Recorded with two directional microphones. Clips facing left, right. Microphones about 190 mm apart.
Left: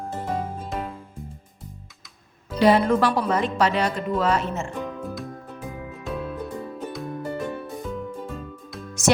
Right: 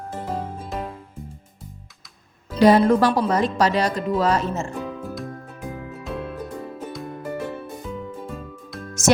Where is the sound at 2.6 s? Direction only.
40° right (ahead or behind).